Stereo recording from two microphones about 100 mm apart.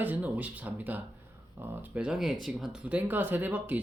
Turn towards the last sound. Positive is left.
turn(degrees=-15)  # may be behind; listen again after turning